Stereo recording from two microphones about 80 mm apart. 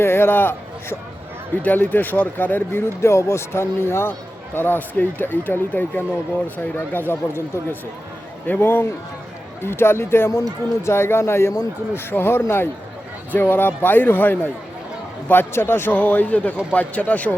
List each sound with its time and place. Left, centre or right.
0.0 s speech: left